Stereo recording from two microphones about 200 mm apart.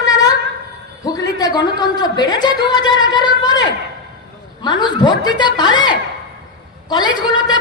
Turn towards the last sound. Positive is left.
turn(degrees=20)  # may be behind; listen again after turning